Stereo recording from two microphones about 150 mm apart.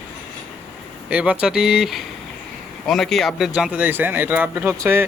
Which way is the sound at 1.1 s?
10° right (ahead or behind).